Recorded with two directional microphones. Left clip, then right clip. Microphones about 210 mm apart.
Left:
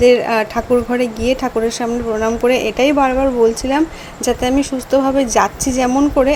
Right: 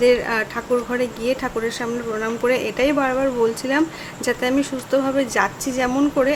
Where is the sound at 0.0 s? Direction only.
15° left (ahead or behind).